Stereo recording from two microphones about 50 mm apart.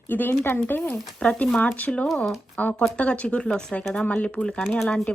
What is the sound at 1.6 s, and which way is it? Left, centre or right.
Speech, left.